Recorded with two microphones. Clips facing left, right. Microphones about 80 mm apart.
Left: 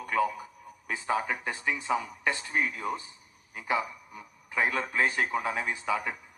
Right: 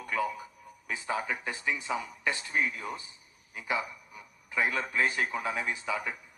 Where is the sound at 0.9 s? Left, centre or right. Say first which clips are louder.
Left 3 dB; left.